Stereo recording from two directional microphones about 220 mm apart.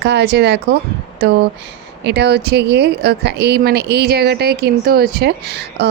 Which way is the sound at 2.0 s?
50° right (ahead or behind).